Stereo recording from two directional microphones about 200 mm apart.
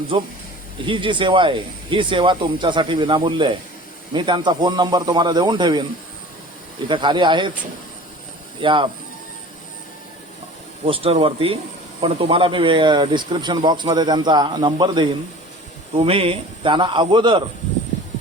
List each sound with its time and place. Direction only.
0.1 s speech: 25° right (ahead or behind)
6.8 s speech: 25° right (ahead or behind)
8.6 s speech: 25° right (ahead or behind)
10.8 s speech: 25° right (ahead or behind)